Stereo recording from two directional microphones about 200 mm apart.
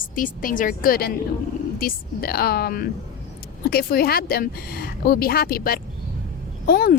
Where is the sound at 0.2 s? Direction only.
40° left (ahead or behind).